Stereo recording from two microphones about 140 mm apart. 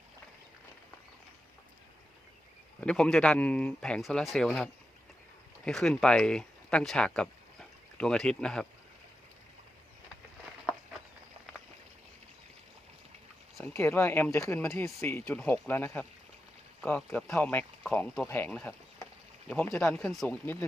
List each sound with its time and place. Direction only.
2.8 s speech: 5° left (ahead or behind)
13.6 s speech: 20° left (ahead or behind)
19.9 s speech: centre (ahead or behind)